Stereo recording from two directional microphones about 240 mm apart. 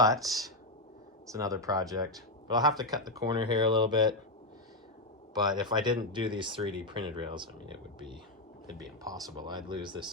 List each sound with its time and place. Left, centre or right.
0.0 s speech: centre
5.3 s speech: centre